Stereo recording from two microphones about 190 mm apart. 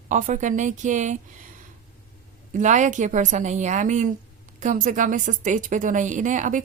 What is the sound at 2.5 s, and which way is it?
A woman's voice, 40° right (ahead or behind).